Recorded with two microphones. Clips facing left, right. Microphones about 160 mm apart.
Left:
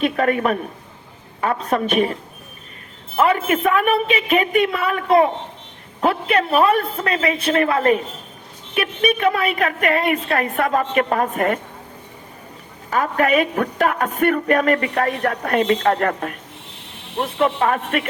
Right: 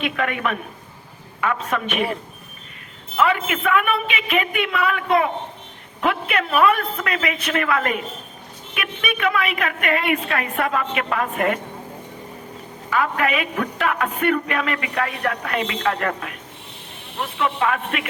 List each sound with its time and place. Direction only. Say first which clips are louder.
0.0 s a man's voice: left 5 dB; 40° left (ahead or behind)
3.2 s a man's voice: left 3 dB; 40° left (ahead or behind)
12.9 s a man's voice: left 3 dB; 40° left (ahead or behind)